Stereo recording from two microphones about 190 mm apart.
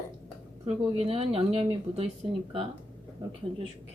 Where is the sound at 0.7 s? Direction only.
30° right (ahead or behind).